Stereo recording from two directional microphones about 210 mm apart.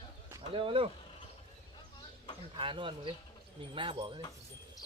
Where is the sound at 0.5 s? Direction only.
25° right (ahead or behind).